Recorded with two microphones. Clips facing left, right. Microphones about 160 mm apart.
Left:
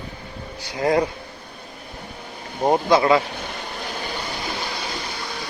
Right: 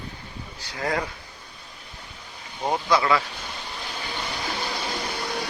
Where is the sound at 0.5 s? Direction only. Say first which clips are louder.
Left 8 dB; 15° left (ahead or behind).